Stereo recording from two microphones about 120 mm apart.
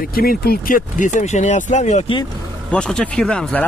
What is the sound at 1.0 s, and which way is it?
Speech, 75° left (ahead or behind).